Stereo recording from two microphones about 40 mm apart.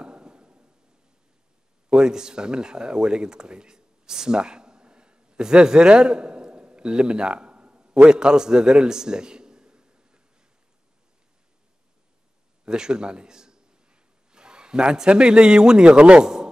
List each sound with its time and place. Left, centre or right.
0.0 s a sound: right
1.9 s speech: centre
12.6 s a man's voice: centre